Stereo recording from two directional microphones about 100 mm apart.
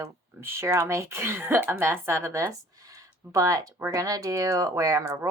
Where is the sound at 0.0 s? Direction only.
25° right (ahead or behind).